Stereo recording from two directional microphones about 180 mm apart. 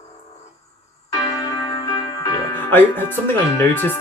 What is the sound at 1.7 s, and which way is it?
Music, 30° left (ahead or behind).